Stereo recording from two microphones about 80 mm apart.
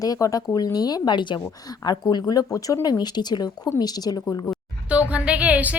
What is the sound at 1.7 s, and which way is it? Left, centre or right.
Speech, left.